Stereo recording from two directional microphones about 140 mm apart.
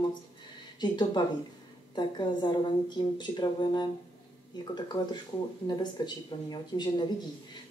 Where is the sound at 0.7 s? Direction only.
30° left (ahead or behind).